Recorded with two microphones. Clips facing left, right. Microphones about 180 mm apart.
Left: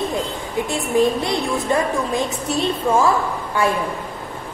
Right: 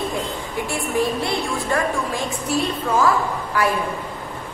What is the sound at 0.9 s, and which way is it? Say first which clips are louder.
A woman's voice: left 4 dB; 20° left (ahead or behind).